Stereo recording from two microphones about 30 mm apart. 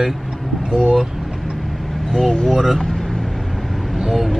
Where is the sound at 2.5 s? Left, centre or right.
Centre.